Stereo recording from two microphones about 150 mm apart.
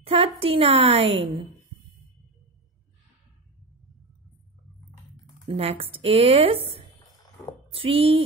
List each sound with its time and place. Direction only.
0.0 s a sound: 40° right (ahead or behind)
0.4 s speech: 40° right (ahead or behind)
5.5 s speech: 40° right (ahead or behind)